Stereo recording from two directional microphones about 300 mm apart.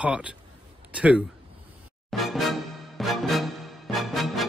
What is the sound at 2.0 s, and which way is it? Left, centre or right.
Music, centre.